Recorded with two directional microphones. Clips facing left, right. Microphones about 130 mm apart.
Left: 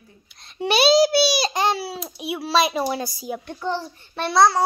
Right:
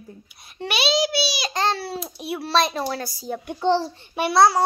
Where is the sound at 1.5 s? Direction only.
10° left (ahead or behind).